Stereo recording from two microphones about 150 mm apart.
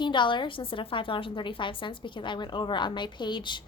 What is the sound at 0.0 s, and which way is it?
A woman's voice, 30° left (ahead or behind).